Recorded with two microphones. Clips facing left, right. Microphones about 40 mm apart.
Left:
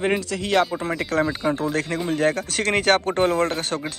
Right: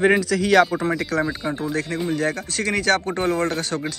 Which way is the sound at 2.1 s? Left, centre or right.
Left.